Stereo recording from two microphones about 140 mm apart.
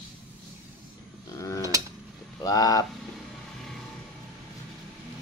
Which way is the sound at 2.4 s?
25° left (ahead or behind).